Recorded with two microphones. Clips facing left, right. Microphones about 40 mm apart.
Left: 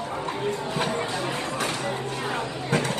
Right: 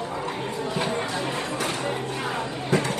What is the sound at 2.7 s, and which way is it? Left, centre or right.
Vehicle, left.